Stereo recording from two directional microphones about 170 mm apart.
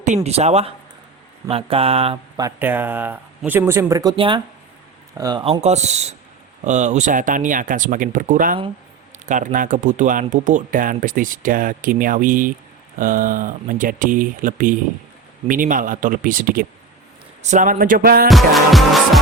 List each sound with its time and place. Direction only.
0.0 s speech: 40° right (ahead or behind)
2.3 s speech: 15° right (ahead or behind)
4.1 s speech: 30° right (ahead or behind)
5.6 s speech: 40° right (ahead or behind)
17.4 s music: 45° right (ahead or behind)
18.3 s music: centre (ahead or behind)